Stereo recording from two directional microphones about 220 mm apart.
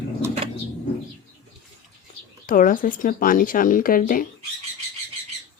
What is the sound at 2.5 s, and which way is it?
Speech, 40° left (ahead or behind).